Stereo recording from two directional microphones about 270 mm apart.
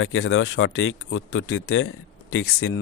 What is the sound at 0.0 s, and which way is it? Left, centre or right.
Speech, left.